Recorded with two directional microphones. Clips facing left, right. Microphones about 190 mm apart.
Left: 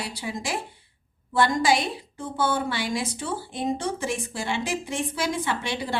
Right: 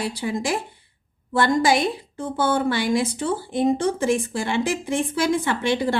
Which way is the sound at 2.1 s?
55° right (ahead or behind).